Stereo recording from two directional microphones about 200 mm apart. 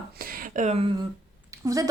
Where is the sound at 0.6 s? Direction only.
35° right (ahead or behind).